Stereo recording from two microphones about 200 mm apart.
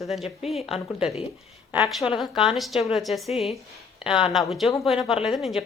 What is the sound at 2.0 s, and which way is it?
Speech, 25° left (ahead or behind).